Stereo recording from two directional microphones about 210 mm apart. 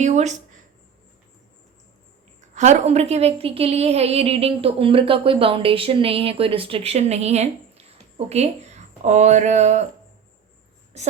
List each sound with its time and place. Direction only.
0.0 s speech: 35° right (ahead or behind)
2.6 s speech: 35° right (ahead or behind)
10.9 s a woman's voice: 30° right (ahead or behind)